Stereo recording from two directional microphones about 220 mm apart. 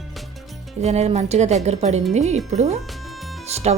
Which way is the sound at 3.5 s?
30° right (ahead or behind).